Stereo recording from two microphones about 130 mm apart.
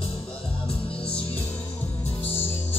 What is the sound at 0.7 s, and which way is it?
Music, 45° left (ahead or behind).